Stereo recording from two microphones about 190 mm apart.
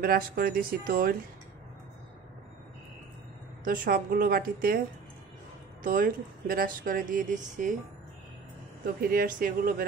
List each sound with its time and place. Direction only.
0.0 s speech: 50° right (ahead or behind)
3.6 s speech: 45° right (ahead or behind)
5.9 s speech: 50° right (ahead or behind)
8.8 s speech: 50° right (ahead or behind)